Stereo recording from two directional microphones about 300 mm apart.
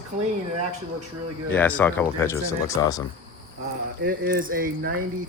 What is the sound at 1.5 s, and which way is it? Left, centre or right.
Speech, centre.